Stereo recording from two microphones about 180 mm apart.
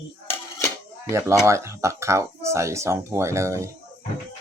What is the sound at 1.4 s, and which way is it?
Speech, 15° right (ahead or behind).